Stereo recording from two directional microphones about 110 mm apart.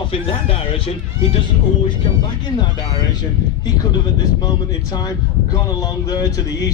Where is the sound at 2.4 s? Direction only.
40° left (ahead or behind).